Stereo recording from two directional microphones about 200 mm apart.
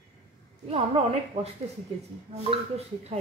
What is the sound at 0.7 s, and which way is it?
A woman's voice, 30° right (ahead or behind).